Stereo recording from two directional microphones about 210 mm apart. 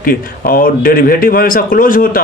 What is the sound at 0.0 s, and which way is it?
Speech, 45° left (ahead or behind).